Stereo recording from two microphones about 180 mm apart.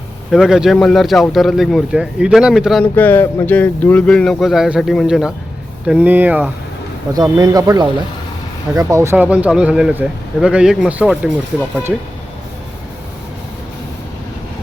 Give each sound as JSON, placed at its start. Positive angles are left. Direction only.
{"t": 0.3, "sound": "speech", "side_deg": 0}
{"t": 2.8, "sound": "speech", "side_deg": 10}
{"t": 7.1, "sound": "a man's voice", "side_deg": -20}